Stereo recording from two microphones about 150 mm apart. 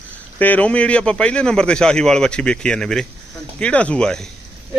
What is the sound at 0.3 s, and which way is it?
A man's voice, 10° left (ahead or behind).